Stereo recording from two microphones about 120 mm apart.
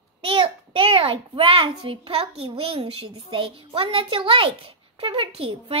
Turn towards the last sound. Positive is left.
turn(degrees=-50)  # may be behind; listen again after turning